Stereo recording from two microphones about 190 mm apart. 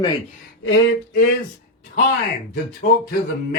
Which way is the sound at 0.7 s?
50° left (ahead or behind).